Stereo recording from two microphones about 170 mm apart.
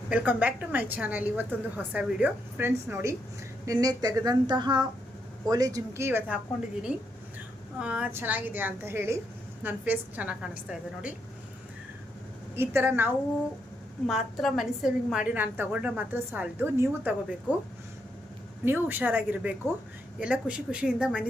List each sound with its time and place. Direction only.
0.1 s a woman's voice: 10° right (ahead or behind)
12.5 s a woman's voice: 15° right (ahead or behind)
14.1 s a woman's voice: centre (ahead or behind)
18.6 s a woman's voice: 10° right (ahead or behind)